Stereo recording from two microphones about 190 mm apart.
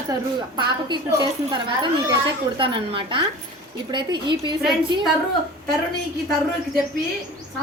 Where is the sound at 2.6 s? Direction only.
25° right (ahead or behind).